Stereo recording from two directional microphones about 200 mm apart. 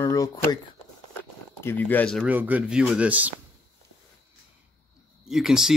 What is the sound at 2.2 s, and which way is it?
Speech, 10° right (ahead or behind).